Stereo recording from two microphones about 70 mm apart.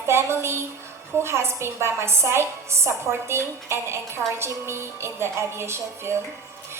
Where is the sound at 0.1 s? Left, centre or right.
Right.